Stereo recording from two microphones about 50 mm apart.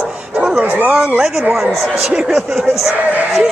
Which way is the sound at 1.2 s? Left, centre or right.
Centre.